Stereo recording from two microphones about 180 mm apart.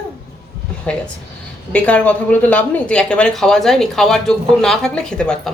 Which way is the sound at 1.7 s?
5° left (ahead or behind).